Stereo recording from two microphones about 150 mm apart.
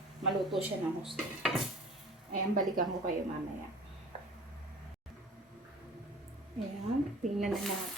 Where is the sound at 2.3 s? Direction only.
65° right (ahead or behind).